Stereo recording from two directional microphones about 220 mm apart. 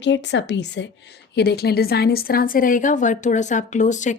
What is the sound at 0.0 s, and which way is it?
A woman's voice, 55° left (ahead or behind).